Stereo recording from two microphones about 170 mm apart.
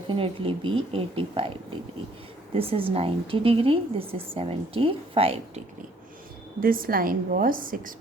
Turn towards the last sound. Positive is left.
turn(degrees=-55)  # may be behind; listen again after turning